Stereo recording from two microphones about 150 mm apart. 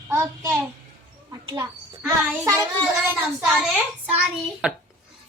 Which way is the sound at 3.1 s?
5° right (ahead or behind).